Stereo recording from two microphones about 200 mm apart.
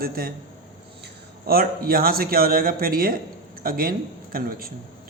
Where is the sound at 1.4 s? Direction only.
50° right (ahead or behind).